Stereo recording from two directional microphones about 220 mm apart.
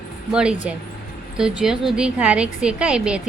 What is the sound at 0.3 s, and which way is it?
A woman's voice, 5° right (ahead or behind).